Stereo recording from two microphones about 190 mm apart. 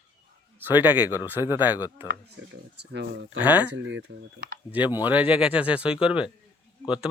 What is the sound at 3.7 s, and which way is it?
Speech, 75° right (ahead or behind).